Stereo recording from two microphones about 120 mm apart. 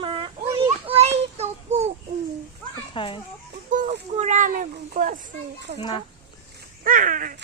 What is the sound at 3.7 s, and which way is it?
A child's voice, 85° right.